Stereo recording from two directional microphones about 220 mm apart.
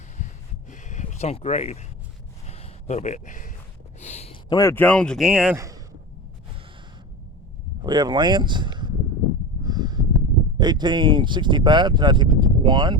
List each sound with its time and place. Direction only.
0.7 s a sound: 35° left (ahead or behind)
4.4 s speech: 15° left (ahead or behind); by 5.5 s 5° right (ahead or behind)
5.5 s speech: 15° right (ahead or behind)
7.9 s speech: 20° right (ahead or behind)
9.6 s snort: 20° right (ahead or behind)
10.6 s speech: 20° right (ahead or behind)